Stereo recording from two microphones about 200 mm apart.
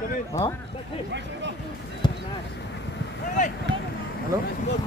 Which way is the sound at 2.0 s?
20° left (ahead or behind).